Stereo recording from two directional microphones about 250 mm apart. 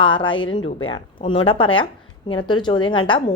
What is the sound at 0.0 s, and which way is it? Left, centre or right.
A woman's voice, centre.